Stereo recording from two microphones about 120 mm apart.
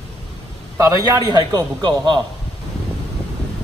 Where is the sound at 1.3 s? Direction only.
35° right (ahead or behind).